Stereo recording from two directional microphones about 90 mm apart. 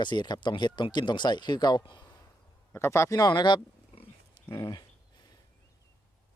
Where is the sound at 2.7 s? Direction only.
30° left (ahead or behind); by 3.5 s 55° left (ahead or behind).